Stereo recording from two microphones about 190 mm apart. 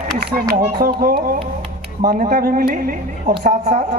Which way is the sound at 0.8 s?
55° right (ahead or behind).